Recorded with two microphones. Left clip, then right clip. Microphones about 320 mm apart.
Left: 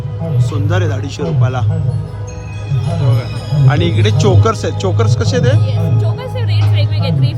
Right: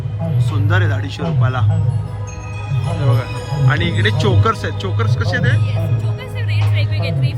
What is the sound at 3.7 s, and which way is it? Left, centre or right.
Speech, centre.